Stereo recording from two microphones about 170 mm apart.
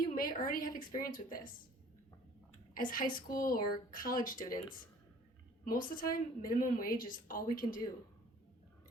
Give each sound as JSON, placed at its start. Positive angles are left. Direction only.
{"t": 0.1, "sound": "a woman's voice", "side_deg": 55}
{"t": 2.7, "sound": "a woman's voice", "side_deg": 55}